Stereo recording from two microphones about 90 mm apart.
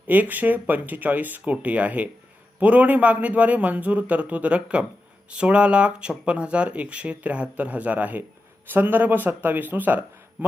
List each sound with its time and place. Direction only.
0.1 s speech: 20° right (ahead or behind)